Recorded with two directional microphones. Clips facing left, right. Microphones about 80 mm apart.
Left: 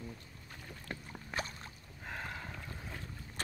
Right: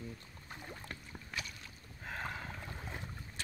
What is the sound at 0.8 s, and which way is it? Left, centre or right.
Boat, left.